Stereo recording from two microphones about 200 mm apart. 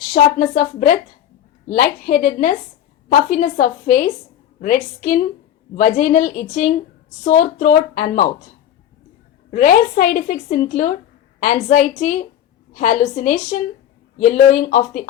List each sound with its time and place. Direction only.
0.1 s a woman's voice: 40° left (ahead or behind)
9.5 s a woman's voice: 40° left (ahead or behind)